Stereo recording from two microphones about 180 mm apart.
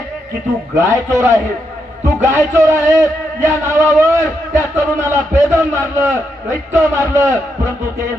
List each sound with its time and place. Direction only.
0.7 s a man's voice: 15° right (ahead or behind)